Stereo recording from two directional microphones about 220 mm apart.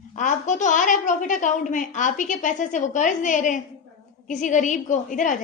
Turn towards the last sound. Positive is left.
turn(degrees=35)  # may be behind; listen again after turning